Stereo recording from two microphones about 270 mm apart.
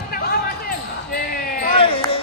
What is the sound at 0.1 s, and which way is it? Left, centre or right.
Basketball bounce, left.